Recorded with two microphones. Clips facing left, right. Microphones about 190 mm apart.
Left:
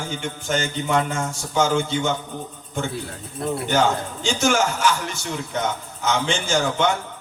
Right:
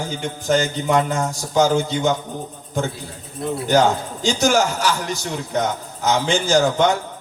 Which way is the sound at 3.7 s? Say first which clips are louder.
Right 5 dB; 35° right (ahead or behind).